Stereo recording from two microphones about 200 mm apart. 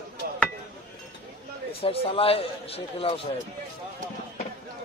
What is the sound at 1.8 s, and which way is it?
A man's voice, 30° left (ahead or behind).